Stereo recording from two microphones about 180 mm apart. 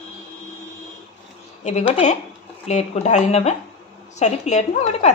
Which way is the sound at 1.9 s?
40° left (ahead or behind).